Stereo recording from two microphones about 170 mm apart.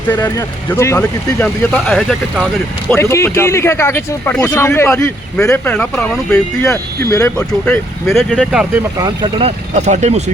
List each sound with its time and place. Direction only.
0.2 s speech: 15° left (ahead or behind)
2.9 s speech: 15° left (ahead or behind)
6.7 s speech: 15° left (ahead or behind); by 8.8 s 5° right (ahead or behind)
9.0 s speech: 25° right (ahead or behind)
9.4 s speech: 40° right (ahead or behind)